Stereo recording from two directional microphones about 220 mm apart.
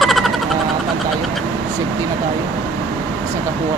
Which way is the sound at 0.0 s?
Centre (ahead or behind).